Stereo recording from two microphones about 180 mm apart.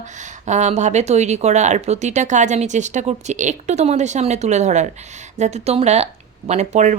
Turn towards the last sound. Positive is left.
turn(degrees=-40)  # may be behind; listen again after turning